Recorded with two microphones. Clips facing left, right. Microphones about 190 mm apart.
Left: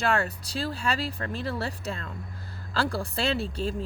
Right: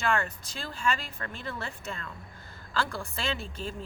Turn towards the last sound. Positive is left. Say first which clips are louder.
# left 6 dB
turn(degrees=35)  # may be behind; listen again after turning